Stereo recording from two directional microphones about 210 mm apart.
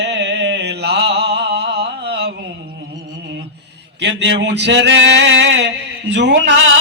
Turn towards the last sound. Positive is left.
turn(degrees=-60)  # may be behind; listen again after turning